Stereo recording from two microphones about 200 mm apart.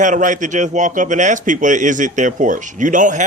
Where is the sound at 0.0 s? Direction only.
40° right (ahead or behind).